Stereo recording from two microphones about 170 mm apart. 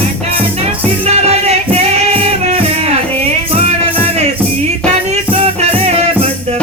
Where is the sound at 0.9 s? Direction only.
40° right (ahead or behind).